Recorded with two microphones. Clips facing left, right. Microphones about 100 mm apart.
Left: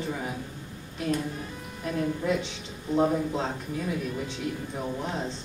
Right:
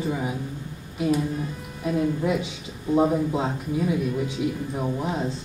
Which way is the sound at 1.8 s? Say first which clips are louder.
Right 4 dB; 10° right (ahead or behind).